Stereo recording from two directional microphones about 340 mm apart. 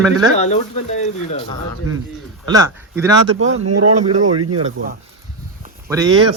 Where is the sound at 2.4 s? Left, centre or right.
Centre.